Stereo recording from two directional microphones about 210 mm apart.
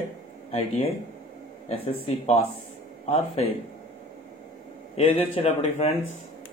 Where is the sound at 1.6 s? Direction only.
25° left (ahead or behind).